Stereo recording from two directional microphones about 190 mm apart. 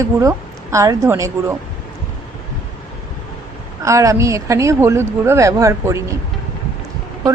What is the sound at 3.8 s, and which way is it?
A woman's voice, 15° right (ahead or behind).